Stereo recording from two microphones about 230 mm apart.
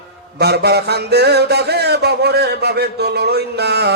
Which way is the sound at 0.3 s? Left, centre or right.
Right.